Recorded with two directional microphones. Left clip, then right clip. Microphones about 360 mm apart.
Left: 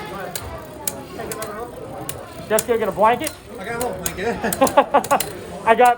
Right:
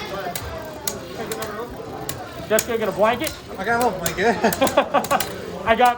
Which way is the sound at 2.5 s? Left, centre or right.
Centre.